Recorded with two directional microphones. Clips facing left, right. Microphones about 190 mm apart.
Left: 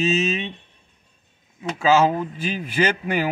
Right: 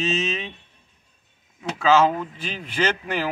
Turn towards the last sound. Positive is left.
turn(degrees=10)  # may be behind; listen again after turning